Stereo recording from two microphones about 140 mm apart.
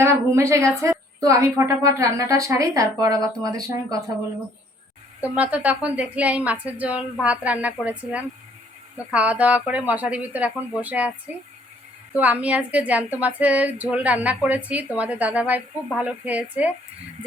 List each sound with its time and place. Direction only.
0.0 s a woman's voice: 20° right (ahead or behind)
5.2 s speech: 10° right (ahead or behind)
12.1 s speech: 10° right (ahead or behind)